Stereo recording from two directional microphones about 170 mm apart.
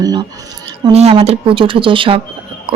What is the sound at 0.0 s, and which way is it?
Speech, 25° right (ahead or behind).